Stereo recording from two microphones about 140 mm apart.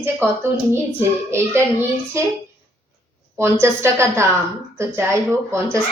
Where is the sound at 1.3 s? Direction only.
15° right (ahead or behind).